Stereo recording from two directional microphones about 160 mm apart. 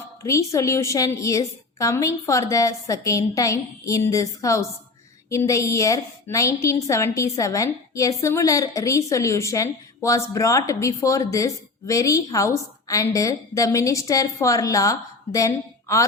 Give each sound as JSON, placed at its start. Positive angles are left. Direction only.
{"t": 0.2, "sound": "a woman's voice", "side_deg": 20}